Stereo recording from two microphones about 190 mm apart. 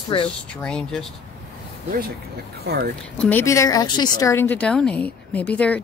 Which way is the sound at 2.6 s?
55° right (ahead or behind).